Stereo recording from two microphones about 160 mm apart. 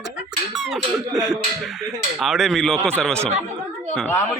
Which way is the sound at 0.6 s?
Centre (ahead or behind).